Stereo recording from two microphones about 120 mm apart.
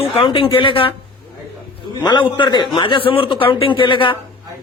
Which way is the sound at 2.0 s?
40° left (ahead or behind).